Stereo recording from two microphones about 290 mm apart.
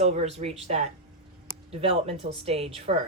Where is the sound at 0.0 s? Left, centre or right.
Right.